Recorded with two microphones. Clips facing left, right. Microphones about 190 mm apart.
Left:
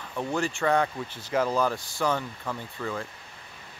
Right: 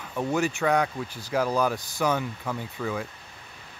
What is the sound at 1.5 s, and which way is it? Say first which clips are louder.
Speech: right 1 dB; 15° right (ahead or behind).